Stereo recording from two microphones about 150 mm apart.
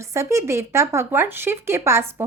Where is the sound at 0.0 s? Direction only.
20° right (ahead or behind).